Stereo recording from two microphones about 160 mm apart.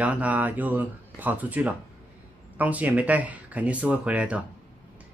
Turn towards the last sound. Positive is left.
turn(degrees=-10)  # may be behind; listen again after turning